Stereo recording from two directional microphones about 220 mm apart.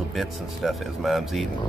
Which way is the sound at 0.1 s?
Centre (ahead or behind).